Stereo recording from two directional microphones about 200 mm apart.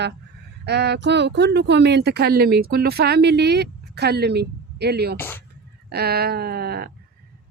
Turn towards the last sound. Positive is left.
turn(degrees=-50)  # may be behind; listen again after turning